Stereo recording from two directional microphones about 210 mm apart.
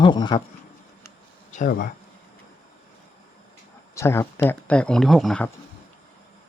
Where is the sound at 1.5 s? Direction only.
40° left (ahead or behind).